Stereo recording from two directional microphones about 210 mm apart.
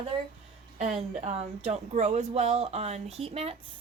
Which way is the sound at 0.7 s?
35° right (ahead or behind).